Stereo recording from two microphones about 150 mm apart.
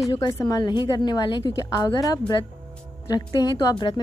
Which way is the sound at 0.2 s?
25° left (ahead or behind).